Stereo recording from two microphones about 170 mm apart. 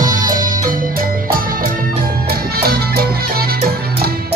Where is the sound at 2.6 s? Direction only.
65° right (ahead or behind).